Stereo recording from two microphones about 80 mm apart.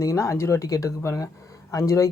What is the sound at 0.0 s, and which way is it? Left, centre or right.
Speech, left.